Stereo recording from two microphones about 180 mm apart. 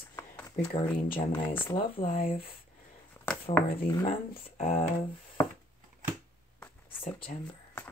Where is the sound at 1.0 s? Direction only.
30° left (ahead or behind).